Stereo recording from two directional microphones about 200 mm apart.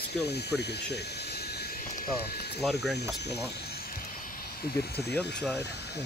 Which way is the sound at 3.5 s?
50° left (ahead or behind).